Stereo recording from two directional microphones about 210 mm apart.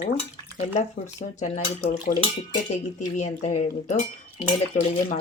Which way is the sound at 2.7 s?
35° left (ahead or behind).